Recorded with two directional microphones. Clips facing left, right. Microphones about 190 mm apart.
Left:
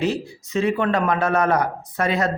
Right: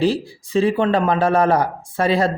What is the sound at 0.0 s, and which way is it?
Speech, 30° right (ahead or behind).